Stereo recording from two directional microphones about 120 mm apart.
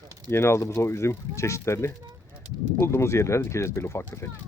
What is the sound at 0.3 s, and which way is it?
Speech, 20° left (ahead or behind).